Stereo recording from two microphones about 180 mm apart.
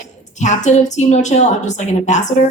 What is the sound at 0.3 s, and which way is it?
A woman's voice, 40° left (ahead or behind).